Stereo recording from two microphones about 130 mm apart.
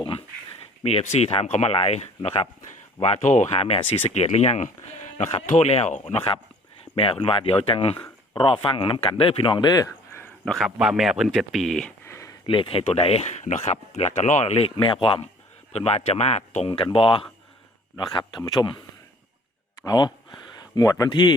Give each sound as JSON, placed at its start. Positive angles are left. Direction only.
{"t": 0.0, "sound": "a sound", "side_deg": 45}
{"t": 1.1, "sound": "speech", "side_deg": 50}
{"t": 6.9, "sound": "speech", "side_deg": 45}
{"t": 7.9, "sound": "a sound", "side_deg": 15}
{"t": 8.4, "sound": "speech", "side_deg": 40}
{"t": 10.4, "sound": "a man's voice", "side_deg": 0}
{"t": 12.0, "sound": "a sound", "side_deg": 20}
{"t": 12.5, "sound": "speech", "side_deg": 40}
{"t": 13.4, "sound": "speech", "side_deg": 60}
{"t": 14.8, "sound": "speech", "side_deg": 40}
{"t": 15.7, "sound": "speech", "side_deg": 50}
{"t": 16.6, "sound": "speech", "side_deg": 45}
{"t": 19.8, "sound": "speech", "side_deg": 30}